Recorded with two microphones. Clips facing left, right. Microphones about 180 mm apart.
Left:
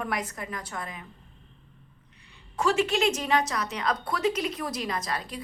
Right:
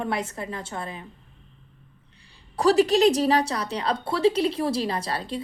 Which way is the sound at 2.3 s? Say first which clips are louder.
Right 6 dB; 35° right (ahead or behind).